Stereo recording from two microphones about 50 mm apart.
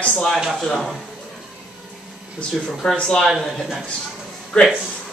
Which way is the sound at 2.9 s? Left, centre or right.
Centre.